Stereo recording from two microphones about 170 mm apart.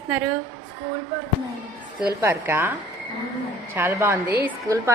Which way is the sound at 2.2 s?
15° right (ahead or behind).